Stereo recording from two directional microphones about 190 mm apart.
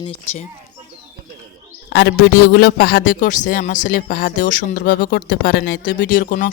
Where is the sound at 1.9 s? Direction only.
65° left (ahead or behind).